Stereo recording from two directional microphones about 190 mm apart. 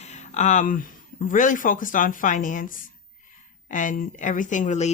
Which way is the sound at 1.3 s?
45° left (ahead or behind).